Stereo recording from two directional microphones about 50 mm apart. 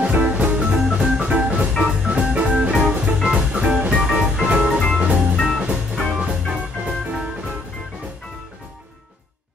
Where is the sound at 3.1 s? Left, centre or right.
Centre.